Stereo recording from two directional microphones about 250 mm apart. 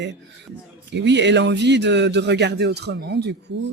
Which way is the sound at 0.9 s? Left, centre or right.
Right.